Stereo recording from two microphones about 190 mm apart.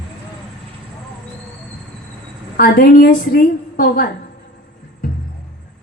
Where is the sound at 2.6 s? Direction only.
50° left (ahead or behind).